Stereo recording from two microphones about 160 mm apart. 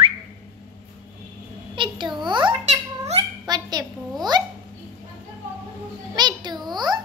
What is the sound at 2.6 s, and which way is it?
Speech, 45° right (ahead or behind).